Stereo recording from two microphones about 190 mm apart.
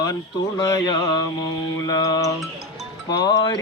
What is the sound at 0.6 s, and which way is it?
Speech, 20° left (ahead or behind).